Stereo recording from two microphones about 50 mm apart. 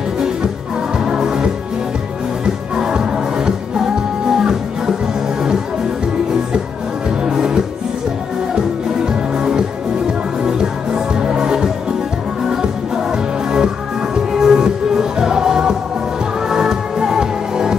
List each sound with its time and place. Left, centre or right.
0.9 s music: centre
7.2 s music: centre
9.0 s music: centre